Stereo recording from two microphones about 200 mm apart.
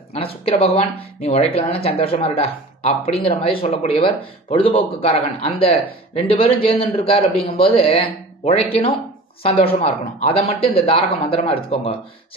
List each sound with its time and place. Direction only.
0.1 s speech: 30° left (ahead or behind)